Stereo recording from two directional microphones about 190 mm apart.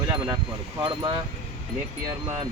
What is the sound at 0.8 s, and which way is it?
Speech, 25° right (ahead or behind).